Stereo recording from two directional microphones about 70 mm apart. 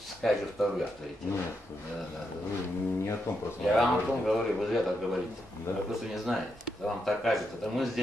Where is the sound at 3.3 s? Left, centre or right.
Left.